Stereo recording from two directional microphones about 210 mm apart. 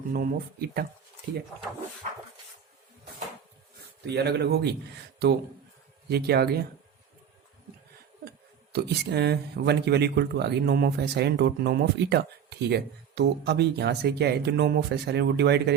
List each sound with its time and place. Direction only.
0.1 s speech: 45° right (ahead or behind)
4.0 s speech: 50° right (ahead or behind)
6.1 s speech: 50° right (ahead or behind)
8.7 s speech: 50° right (ahead or behind)